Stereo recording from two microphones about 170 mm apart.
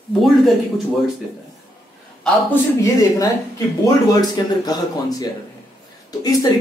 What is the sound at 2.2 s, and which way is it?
Speech, 15° left (ahead or behind).